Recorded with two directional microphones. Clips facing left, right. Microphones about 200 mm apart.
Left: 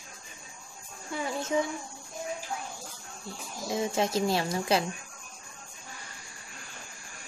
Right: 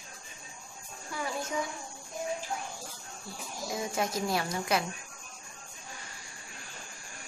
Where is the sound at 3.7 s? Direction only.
25° left (ahead or behind).